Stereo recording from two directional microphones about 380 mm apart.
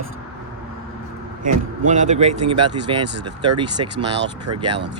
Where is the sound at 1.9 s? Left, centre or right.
Centre.